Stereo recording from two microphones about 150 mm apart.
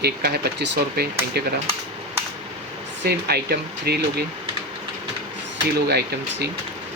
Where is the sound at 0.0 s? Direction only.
90° right.